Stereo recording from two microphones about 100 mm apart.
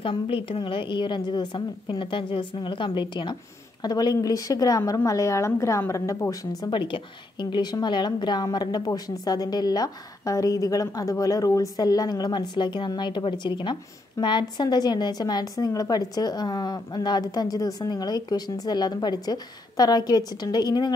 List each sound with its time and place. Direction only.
0.0 s a woman's voice: 60° left (ahead or behind)
3.8 s a woman's voice: 40° left (ahead or behind)
6.7 s a woman's voice: 55° left (ahead or behind)